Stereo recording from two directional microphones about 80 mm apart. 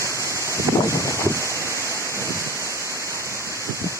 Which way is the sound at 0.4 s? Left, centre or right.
Right.